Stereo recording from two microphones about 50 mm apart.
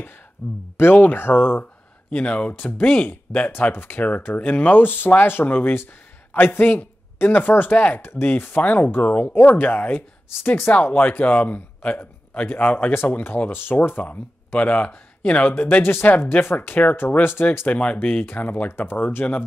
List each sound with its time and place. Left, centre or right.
0.4 s speech: left
1.6 s speech: left
8.1 s speech: left
9.0 s speech: left
9.7 s speech: left
10.7 s speech: left
11.9 s speech: left
14.0 s speech: left
15.5 s speech: left
17.6 s speech: left
18.7 s speech: left